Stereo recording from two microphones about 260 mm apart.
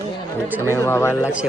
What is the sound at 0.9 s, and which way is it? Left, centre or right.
Speech, centre.